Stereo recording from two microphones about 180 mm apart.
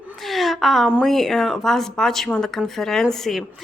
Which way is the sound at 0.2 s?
Centre (ahead or behind).